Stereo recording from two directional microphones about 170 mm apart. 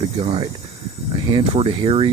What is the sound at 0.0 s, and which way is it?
Speech, 35° right (ahead or behind).